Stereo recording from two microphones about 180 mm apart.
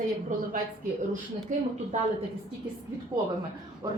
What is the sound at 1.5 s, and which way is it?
Speech, 45° right (ahead or behind).